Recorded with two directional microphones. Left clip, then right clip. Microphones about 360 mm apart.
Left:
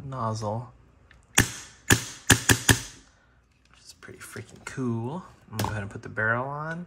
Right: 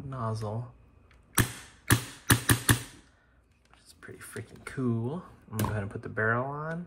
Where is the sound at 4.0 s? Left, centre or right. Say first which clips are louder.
Left 2 dB; centre.